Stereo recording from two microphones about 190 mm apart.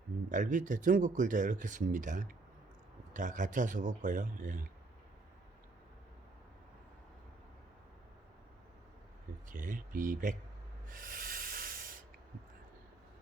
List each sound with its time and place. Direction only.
0.3 s speech: 40° right (ahead or behind)
9.5 s speech: 45° right (ahead or behind)
10.8 s rub: 45° right (ahead or behind)